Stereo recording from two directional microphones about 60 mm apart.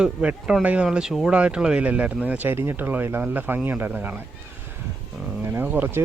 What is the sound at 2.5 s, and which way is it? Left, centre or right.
Speech, right.